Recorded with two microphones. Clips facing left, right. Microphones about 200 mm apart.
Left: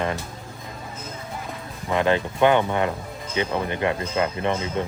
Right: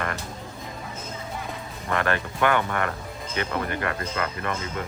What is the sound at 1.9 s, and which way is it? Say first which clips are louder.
Speech: left 5 dB; 20° left (ahead or behind).